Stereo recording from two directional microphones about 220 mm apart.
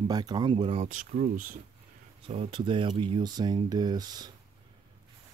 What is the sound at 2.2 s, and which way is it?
Speech, 25° right (ahead or behind).